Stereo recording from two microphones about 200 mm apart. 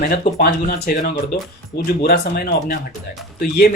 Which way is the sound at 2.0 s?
50° left (ahead or behind).